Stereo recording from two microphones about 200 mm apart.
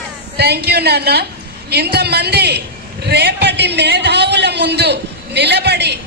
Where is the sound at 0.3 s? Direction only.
55° right (ahead or behind).